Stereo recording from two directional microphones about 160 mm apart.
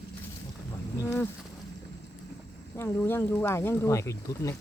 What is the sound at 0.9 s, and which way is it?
Speech, 15° left (ahead or behind).